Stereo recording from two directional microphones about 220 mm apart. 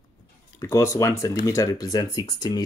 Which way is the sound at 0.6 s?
15° left (ahead or behind).